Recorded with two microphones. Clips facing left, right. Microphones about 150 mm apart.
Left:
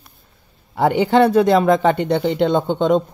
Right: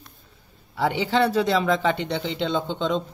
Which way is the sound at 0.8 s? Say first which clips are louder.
Left 7 dB; 55° left (ahead or behind).